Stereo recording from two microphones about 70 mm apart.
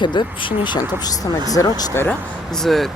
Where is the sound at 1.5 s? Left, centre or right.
Left.